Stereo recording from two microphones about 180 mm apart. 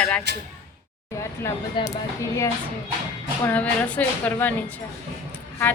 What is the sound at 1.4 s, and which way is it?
Speech, 20° left (ahead or behind).